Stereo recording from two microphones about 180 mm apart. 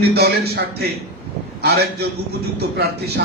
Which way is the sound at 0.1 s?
60° right (ahead or behind).